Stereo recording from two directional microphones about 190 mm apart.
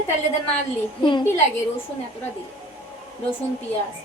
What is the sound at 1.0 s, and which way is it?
Speech, 25° left (ahead or behind).